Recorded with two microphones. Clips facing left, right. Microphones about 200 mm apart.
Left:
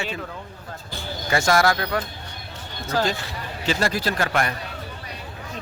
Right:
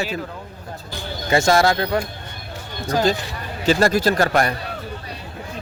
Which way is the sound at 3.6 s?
45° right (ahead or behind).